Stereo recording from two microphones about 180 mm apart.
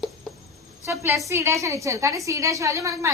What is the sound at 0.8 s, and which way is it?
A woman's voice, 15° right (ahead or behind).